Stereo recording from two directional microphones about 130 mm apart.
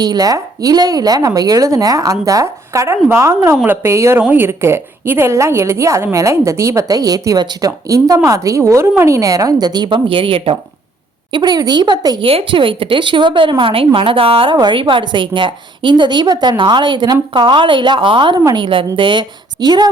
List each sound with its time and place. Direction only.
0.0 s a woman's voice: 30° right (ahead or behind)
12.2 s a woman's voice: 45° right (ahead or behind)